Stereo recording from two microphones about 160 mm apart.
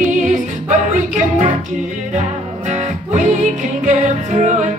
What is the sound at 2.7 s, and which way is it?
Music, 50° right (ahead or behind).